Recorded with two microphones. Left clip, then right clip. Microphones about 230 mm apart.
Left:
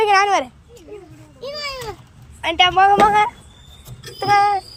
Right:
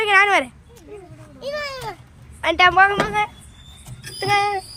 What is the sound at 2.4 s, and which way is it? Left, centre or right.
Speech, centre.